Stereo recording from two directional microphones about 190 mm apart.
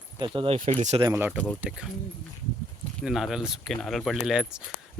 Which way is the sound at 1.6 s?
5° right (ahead or behind).